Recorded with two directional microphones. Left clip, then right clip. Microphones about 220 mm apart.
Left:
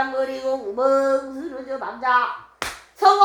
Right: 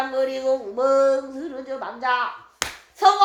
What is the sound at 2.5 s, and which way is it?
Hands, 40° right (ahead or behind).